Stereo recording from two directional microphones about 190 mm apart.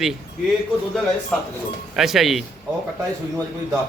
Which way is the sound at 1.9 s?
Centre (ahead or behind).